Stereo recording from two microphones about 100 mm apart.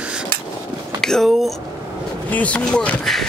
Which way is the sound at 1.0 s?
5° left (ahead or behind).